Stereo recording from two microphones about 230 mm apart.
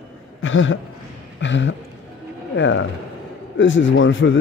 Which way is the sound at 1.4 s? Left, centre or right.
Left.